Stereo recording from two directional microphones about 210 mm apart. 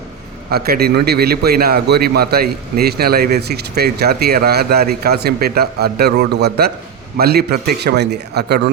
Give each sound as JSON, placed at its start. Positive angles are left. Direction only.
{"t": 0.5, "sound": "a man's voice", "side_deg": -50}